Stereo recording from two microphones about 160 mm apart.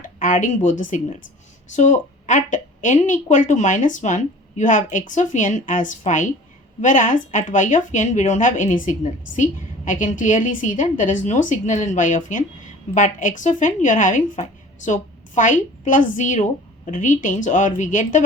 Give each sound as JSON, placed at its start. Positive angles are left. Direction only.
{"t": 0.0, "sound": "a woman's voice", "side_deg": 55}